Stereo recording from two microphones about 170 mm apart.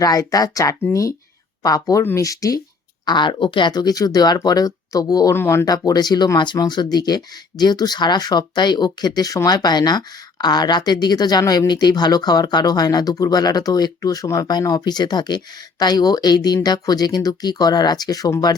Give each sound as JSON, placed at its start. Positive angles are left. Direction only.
{"t": 0.0, "sound": "speech", "side_deg": 20}